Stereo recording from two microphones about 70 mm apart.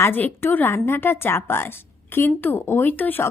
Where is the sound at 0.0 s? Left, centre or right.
Left.